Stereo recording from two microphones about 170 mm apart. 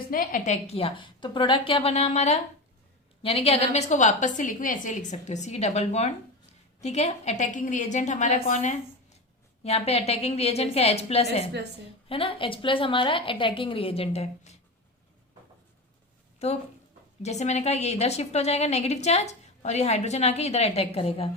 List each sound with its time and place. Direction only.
0.1 s a woman's voice: 55° left (ahead or behind); by 14.5 s 35° left (ahead or behind)
16.4 s a woman's voice: 40° left (ahead or behind)